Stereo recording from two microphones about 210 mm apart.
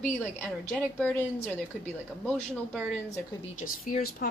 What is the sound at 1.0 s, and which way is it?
A woman's voice, 5° left (ahead or behind).